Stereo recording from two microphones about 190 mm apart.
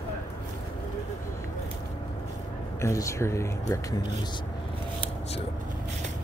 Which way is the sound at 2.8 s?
15° left (ahead or behind).